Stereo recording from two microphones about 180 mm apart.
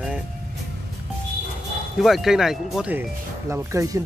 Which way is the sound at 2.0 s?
Centre (ahead or behind).